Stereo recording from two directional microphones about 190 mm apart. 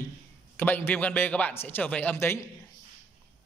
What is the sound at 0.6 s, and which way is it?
A man's voice, 10° left (ahead or behind).